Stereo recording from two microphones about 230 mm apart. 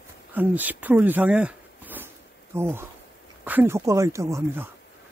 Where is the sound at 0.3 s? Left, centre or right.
Centre.